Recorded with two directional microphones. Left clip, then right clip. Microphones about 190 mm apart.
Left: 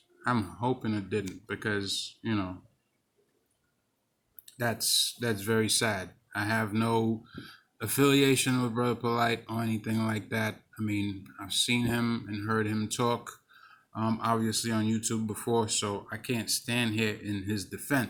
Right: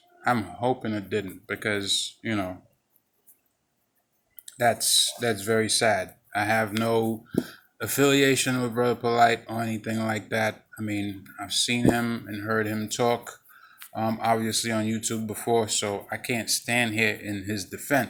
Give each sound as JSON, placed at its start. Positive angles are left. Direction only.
{"t": 0.3, "sound": "speech", "side_deg": 35}
{"t": 4.4, "sound": "speech", "side_deg": 30}
{"t": 13.6, "sound": "a sound", "side_deg": 35}
{"t": 13.9, "sound": "speech", "side_deg": 35}